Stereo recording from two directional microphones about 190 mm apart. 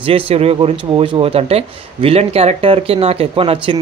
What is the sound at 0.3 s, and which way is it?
Speech, 30° right (ahead or behind).